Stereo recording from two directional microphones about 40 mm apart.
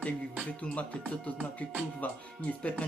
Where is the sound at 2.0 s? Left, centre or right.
Left.